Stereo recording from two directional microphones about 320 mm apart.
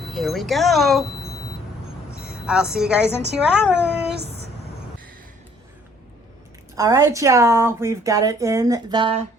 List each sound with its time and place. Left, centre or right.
0.0 s speech: centre
2.1 s a woman's voice: centre
4.1 s a sound: right
6.7 s speech: centre